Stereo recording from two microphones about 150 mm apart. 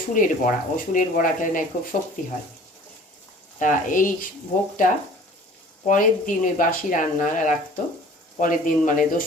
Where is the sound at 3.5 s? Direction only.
60° left (ahead or behind).